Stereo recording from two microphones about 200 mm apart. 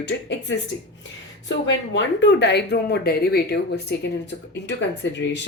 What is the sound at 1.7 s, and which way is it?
Speech, 65° left (ahead or behind).